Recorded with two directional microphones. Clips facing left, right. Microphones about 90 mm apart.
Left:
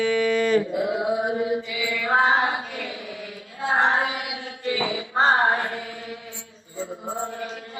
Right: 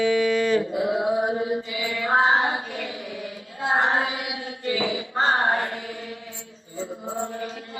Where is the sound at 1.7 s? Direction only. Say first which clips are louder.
Even; 35° right (ahead or behind).